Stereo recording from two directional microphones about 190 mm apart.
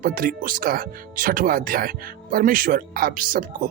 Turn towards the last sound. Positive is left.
turn(degrees=-45)  # may be behind; listen again after turning